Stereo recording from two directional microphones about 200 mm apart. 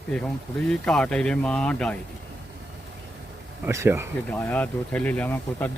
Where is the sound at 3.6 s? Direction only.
15° right (ahead or behind).